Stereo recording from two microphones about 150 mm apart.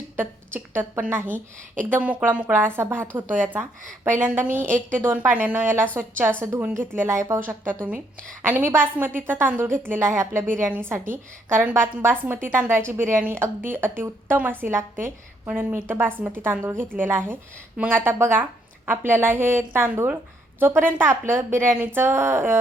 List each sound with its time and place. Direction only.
0.2 s a woman's voice: 15° right (ahead or behind)